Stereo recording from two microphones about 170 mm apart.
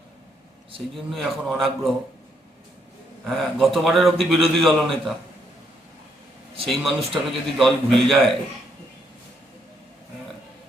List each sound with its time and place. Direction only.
0.9 s a man's voice: centre (ahead or behind)
3.2 s a man's voice: centre (ahead or behind)
6.7 s a man's voice: centre (ahead or behind)